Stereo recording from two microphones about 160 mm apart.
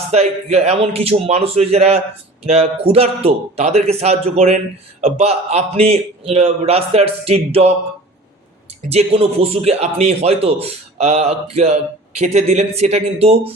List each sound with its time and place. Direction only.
0.1 s a man's voice: 40° right (ahead or behind)
8.9 s a man's voice: 40° right (ahead or behind)